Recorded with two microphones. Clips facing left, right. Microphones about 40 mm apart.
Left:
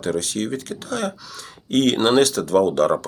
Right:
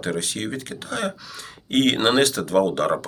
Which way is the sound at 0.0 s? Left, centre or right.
Right.